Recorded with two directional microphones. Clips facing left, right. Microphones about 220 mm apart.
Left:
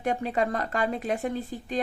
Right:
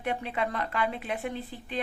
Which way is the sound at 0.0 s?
40° left (ahead or behind).